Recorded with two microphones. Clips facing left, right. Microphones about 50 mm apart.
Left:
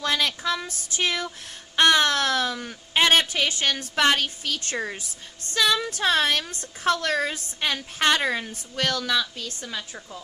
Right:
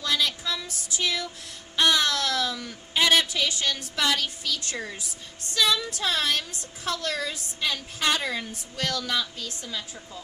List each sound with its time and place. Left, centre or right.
0.0 s a woman's voice: left